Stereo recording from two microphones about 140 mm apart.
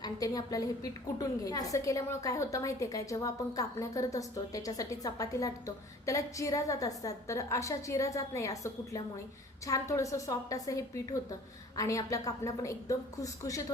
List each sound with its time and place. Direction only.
0.0 s a woman's voice: 25° left (ahead or behind)